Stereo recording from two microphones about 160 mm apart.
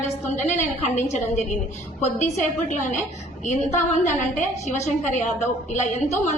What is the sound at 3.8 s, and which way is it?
A woman's voice, 45° left (ahead or behind).